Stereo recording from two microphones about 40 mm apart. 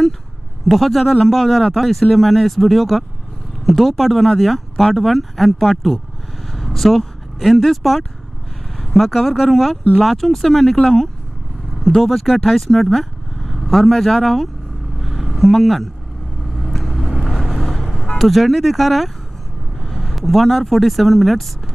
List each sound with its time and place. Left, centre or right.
0.7 s speech: centre
15.0 s a sound: centre
16.5 s vehicle: centre
18.1 s speech: centre